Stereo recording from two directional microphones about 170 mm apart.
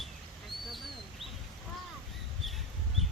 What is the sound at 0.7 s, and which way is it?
Bird, centre (ahead or behind).